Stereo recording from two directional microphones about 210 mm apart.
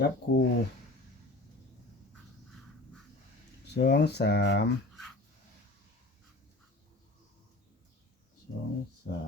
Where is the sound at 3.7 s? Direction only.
50° left (ahead or behind).